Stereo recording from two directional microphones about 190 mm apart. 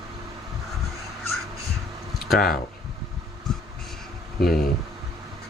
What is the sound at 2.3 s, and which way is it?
Speech, 50° left (ahead or behind).